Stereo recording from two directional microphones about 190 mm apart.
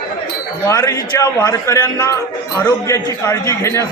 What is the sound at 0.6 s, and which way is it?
A man's voice, 15° left (ahead or behind).